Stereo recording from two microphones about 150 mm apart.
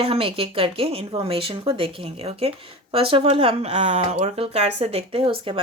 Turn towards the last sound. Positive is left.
turn(degrees=-35)  # may be behind; listen again after turning